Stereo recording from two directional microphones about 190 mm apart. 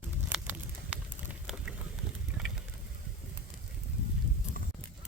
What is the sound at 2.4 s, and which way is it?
Vehicle, 5° right (ahead or behind).